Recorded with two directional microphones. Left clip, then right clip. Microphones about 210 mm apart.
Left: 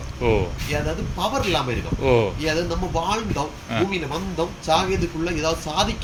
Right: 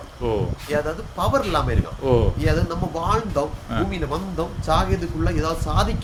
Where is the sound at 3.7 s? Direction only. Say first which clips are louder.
Left 3 dB; 15° right (ahead or behind).